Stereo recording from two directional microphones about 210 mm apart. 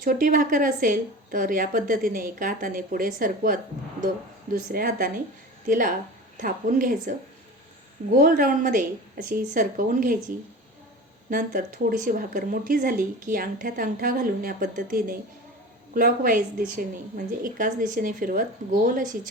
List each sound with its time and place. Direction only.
0.0 s speech: 40° right (ahead or behind)
11.3 s speech: 40° right (ahead or behind)